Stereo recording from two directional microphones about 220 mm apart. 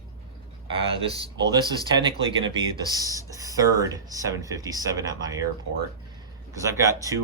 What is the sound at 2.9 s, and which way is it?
Speech, 15° right (ahead or behind).